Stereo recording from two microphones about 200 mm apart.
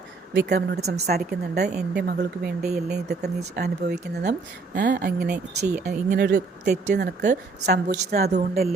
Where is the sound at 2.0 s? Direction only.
50° right (ahead or behind).